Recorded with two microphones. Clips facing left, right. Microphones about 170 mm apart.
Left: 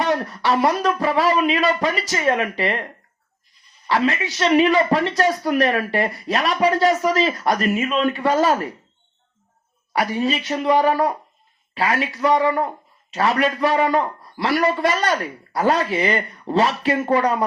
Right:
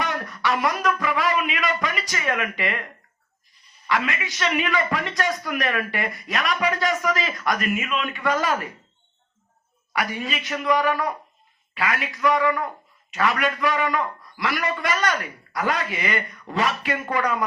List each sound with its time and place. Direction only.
0.0 s speech: 30° left (ahead or behind)
3.8 s speech: 30° left (ahead or behind)
9.9 s speech: 30° left (ahead or behind)